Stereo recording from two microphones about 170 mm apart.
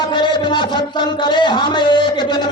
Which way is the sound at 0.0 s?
25° left (ahead or behind).